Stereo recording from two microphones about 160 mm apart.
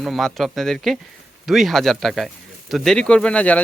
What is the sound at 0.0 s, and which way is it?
Speech, centre (ahead or behind).